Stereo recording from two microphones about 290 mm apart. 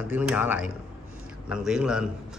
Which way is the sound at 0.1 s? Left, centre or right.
Centre.